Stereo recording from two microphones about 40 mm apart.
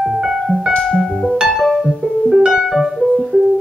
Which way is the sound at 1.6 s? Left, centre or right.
Centre.